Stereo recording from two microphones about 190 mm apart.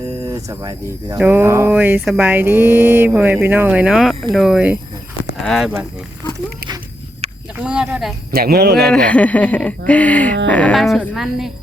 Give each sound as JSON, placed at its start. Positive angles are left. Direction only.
{"t": 0.3, "sound": "cricket", "side_deg": -20}
{"t": 1.2, "sound": "a sound", "side_deg": -10}
{"t": 3.4, "sound": "speech", "side_deg": -10}
{"t": 7.6, "sound": "speech", "side_deg": -5}
{"t": 8.3, "sound": "speech", "side_deg": -55}
{"t": 8.9, "sound": "speech", "side_deg": 5}